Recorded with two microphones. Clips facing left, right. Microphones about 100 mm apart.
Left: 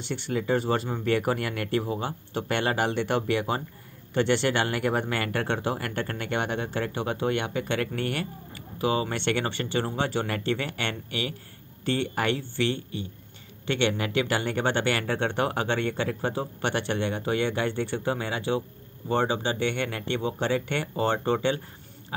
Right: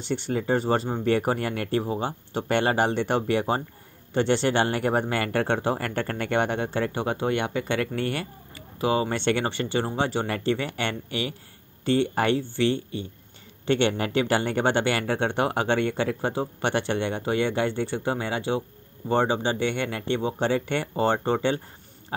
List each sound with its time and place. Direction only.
0.0 s speech: 35° right (ahead or behind)
2.4 s speech: 35° right (ahead or behind)